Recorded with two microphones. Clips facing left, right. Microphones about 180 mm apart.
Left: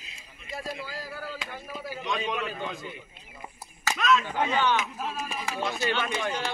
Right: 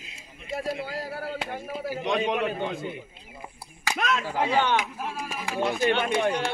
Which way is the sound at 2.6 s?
55° right (ahead or behind).